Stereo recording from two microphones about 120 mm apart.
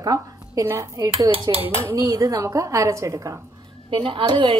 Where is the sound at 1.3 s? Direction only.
50° right (ahead or behind).